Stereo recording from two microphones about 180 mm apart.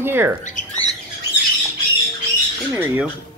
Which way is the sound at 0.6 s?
45° left (ahead or behind).